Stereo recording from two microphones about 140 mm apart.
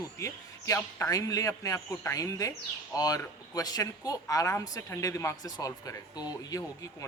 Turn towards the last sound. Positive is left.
turn(degrees=25)  # may be behind; listen again after turning